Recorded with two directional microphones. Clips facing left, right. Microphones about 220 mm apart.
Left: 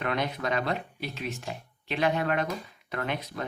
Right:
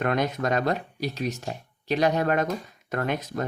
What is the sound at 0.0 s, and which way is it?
Speech, 45° right (ahead or behind).